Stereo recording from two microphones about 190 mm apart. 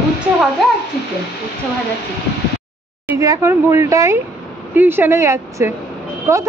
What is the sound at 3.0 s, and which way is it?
Speech, 15° right (ahead or behind).